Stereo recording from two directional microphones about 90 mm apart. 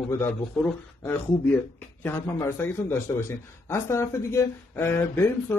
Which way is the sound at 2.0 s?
20° left (ahead or behind).